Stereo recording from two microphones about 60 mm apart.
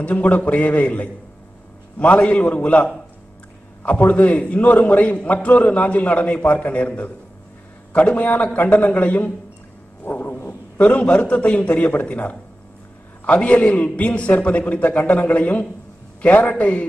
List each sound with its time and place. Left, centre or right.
0.0 s a man's voice: left
10.0 s a sound: left
10.8 s a man's voice: left